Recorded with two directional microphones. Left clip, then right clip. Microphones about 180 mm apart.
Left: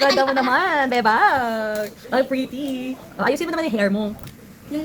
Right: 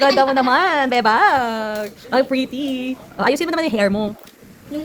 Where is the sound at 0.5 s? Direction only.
20° right (ahead or behind).